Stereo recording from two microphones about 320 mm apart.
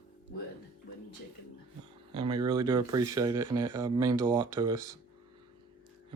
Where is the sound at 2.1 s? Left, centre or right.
Centre.